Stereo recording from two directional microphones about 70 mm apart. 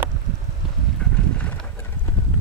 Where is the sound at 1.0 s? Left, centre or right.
Centre.